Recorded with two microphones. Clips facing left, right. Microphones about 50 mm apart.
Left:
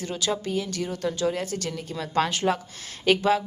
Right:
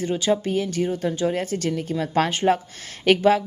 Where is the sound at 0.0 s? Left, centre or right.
Right.